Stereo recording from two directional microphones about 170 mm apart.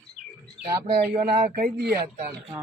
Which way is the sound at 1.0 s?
40° right (ahead or behind).